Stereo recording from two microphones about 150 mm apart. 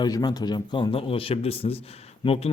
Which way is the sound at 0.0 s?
30° left (ahead or behind).